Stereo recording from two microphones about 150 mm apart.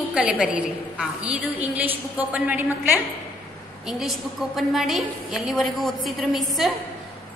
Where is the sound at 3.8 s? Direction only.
Centre (ahead or behind).